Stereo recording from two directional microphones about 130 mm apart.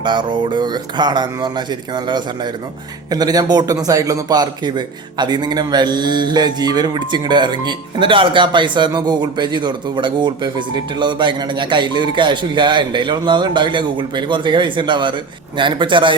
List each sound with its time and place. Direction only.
0.0 s a man's voice: 35° right (ahead or behind)